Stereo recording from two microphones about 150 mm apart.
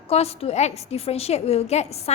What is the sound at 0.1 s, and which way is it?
A woman's voice, 45° left (ahead or behind).